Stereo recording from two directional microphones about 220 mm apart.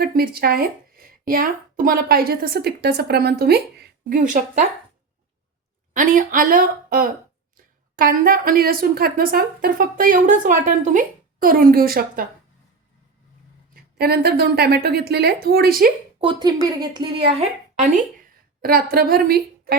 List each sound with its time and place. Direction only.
0.0 s speech: 45° right (ahead or behind)
5.9 s speech: 35° right (ahead or behind)
13.7 s speech: 45° right (ahead or behind)
16.2 s speech: 20° right (ahead or behind)
18.2 s a sound: 40° right (ahead or behind)